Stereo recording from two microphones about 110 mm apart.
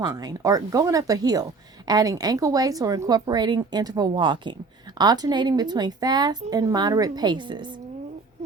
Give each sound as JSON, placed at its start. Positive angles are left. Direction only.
{"t": 0.0, "sound": "a woman's voice", "side_deg": -35}